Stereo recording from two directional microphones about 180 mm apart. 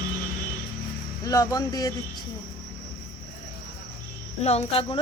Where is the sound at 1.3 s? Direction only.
20° left (ahead or behind).